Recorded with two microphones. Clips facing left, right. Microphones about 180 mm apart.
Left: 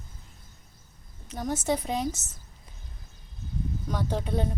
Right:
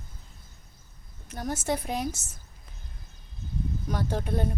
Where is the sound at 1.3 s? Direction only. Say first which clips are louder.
Left 2 dB; 5° right (ahead or behind).